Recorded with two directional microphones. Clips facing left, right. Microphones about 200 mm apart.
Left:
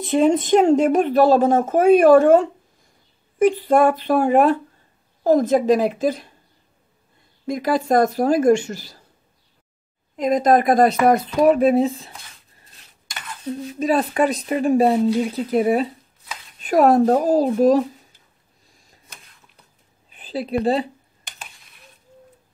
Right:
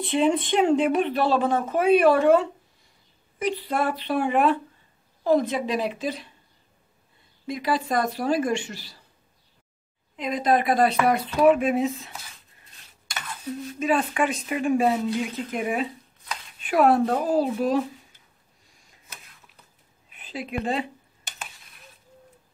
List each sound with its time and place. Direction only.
0.0 s speech: 45° left (ahead or behind)
7.4 s speech: 45° left (ahead or behind)
10.1 s speech: 45° left (ahead or behind)
13.7 s speech: 35° left (ahead or behind)
20.1 s speech: 35° left (ahead or behind)
21.6 s a sound: centre (ahead or behind)